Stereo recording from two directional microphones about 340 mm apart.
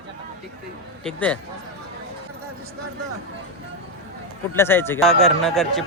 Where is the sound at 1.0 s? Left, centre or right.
Centre.